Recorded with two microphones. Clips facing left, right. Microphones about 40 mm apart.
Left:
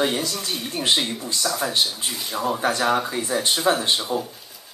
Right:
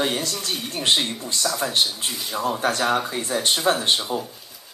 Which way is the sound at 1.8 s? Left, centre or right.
Centre.